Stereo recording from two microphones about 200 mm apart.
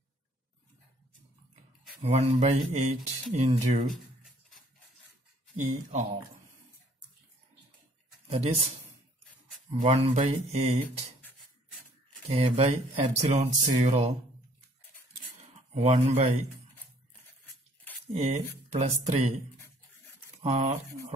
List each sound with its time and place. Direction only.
2.0 s speech: 30° right (ahead or behind)
5.6 s speech: 30° right (ahead or behind)
9.7 s speech: 35° right (ahead or behind)
12.3 s speech: 30° right (ahead or behind)
15.7 s speech: 35° right (ahead or behind)
18.1 s speech: 35° right (ahead or behind)
20.4 s speech: 30° right (ahead or behind)